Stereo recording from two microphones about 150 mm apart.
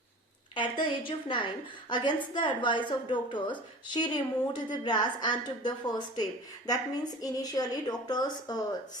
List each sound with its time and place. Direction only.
0.5 s a woman's voice: 35° left (ahead or behind)